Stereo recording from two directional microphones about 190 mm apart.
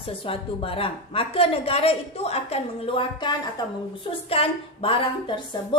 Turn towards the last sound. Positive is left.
turn(degrees=30)  # may be behind; listen again after turning